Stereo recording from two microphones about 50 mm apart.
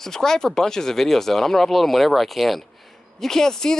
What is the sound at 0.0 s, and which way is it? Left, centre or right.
Speech, centre.